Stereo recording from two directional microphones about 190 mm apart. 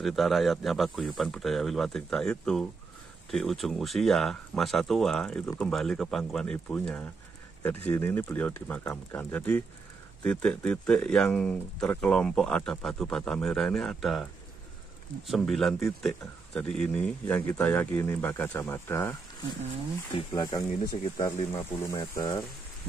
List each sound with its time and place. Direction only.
0.0 s a man's voice: centre (ahead or behind)
15.2 s a man's voice: centre (ahead or behind)
20.1 s a man's voice: 25° left (ahead or behind)